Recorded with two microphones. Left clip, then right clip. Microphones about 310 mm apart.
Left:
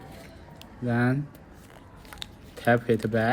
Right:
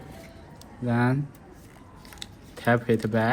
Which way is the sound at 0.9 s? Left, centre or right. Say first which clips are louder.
Right 1 dB; centre.